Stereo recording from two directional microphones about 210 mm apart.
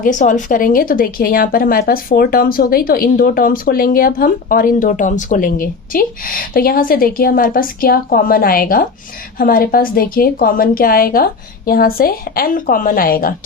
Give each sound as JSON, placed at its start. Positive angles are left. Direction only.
{"t": 0.0, "sound": "speech", "side_deg": 35}